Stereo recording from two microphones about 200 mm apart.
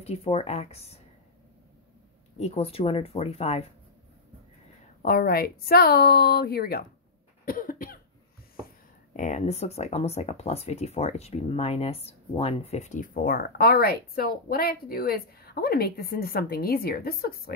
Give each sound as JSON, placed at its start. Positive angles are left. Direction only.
{"t": 0.0, "sound": "speech", "side_deg": 30}
{"t": 2.3, "sound": "speech", "side_deg": 30}
{"t": 5.0, "sound": "speech", "side_deg": 50}
{"t": 7.4, "sound": "cough", "side_deg": 45}
{"t": 9.1, "sound": "speech", "side_deg": 35}